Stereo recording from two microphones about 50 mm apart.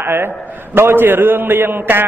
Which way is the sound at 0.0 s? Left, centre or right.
Right.